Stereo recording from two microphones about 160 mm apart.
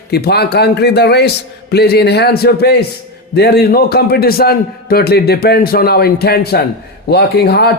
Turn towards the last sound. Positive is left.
turn(degrees=90)